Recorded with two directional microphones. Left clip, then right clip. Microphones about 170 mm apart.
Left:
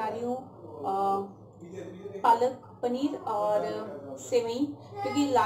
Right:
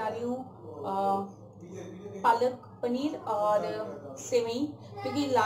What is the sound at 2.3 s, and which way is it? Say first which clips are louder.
Speech: left 1 dB; 20° left (ahead or behind).